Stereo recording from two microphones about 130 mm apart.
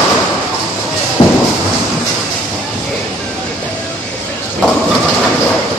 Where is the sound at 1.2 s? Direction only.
35° left (ahead or behind).